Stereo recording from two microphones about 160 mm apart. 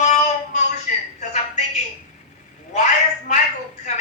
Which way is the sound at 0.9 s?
55° left (ahead or behind).